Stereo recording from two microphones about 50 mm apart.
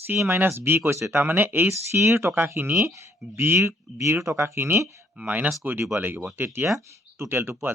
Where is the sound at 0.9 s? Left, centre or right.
Right.